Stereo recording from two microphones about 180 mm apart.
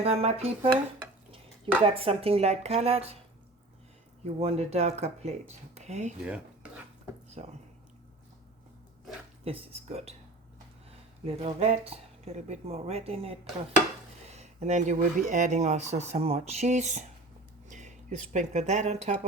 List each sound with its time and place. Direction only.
0.0 s speech: 35° right (ahead or behind)
1.8 s speech: 30° right (ahead or behind)
4.2 s speech: 35° right (ahead or behind)
7.4 s speech: 40° right (ahead or behind)
9.4 s speech: 35° right (ahead or behind)
11.3 s speech: 35° right (ahead or behind)
17.7 s a sound: 40° right (ahead or behind)
18.3 s speech: 40° right (ahead or behind)